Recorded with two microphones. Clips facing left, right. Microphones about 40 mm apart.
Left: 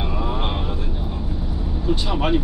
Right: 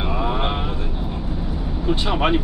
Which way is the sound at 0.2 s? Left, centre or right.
Right.